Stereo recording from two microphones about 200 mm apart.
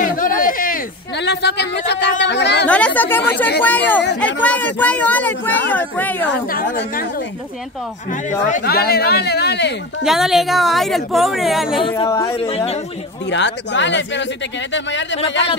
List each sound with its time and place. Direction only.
0.0 s a sound: 45° left (ahead or behind); by 2.6 s 60° left (ahead or behind)
2.6 s speech: 5° left (ahead or behind)
6.5 s a woman's voice: 40° left (ahead or behind)
8.5 s speech: 45° left (ahead or behind)
10.0 s speech: centre (ahead or behind)
12.1 s speech: 15° left (ahead or behind)
12.4 s speech: 30° left (ahead or behind)
13.3 s speech: 65° left (ahead or behind)